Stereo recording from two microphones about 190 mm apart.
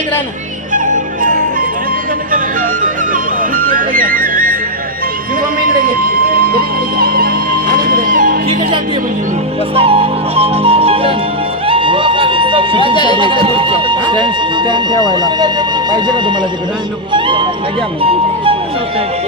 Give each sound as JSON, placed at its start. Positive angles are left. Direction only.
{"t": 2.3, "sound": "music", "side_deg": -45}
{"t": 5.6, "sound": "music", "side_deg": -50}
{"t": 9.7, "sound": "music", "side_deg": -30}
{"t": 12.9, "sound": "speech", "side_deg": 25}
{"t": 13.1, "sound": "speech", "side_deg": -25}